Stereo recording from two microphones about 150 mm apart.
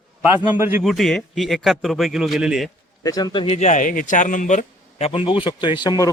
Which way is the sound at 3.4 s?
45° left (ahead or behind).